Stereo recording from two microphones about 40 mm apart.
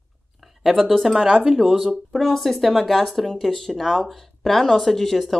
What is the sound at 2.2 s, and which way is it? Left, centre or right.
Speech, centre.